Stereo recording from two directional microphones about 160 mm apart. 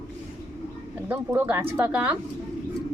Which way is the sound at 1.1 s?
10° right (ahead or behind).